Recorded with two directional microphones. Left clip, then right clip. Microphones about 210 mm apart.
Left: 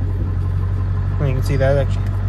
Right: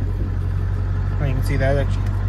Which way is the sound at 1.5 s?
20° left (ahead or behind).